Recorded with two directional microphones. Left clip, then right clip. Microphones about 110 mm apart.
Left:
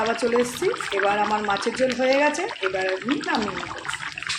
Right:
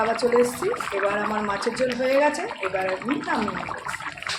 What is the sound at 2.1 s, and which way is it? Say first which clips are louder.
Speech: even; 15° left (ahead or behind).